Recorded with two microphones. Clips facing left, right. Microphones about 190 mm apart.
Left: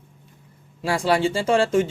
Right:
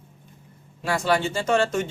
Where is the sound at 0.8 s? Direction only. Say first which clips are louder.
Left 3 dB; 30° left (ahead or behind).